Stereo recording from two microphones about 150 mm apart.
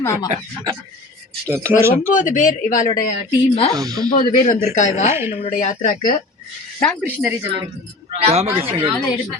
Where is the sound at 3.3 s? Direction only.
40° left (ahead or behind).